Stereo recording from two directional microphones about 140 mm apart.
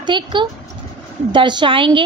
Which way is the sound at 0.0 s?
35° right (ahead or behind).